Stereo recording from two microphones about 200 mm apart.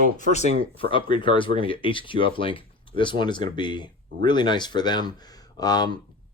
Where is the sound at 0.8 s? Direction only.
25° left (ahead or behind).